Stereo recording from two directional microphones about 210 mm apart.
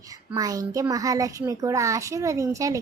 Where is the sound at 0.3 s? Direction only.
15° right (ahead or behind).